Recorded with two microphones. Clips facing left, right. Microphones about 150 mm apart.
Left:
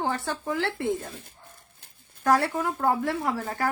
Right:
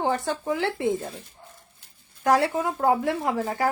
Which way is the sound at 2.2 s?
15° right (ahead or behind).